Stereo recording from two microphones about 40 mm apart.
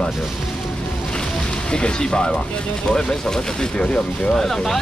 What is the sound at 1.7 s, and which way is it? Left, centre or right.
Speech, left.